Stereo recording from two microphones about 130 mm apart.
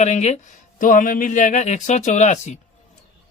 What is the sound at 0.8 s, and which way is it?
Speech, 90° left.